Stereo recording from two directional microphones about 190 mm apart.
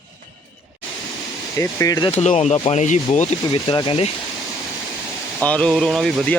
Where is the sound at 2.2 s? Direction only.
35° left (ahead or behind).